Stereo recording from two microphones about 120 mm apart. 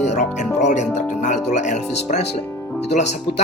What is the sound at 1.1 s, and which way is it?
Speech, 90° left.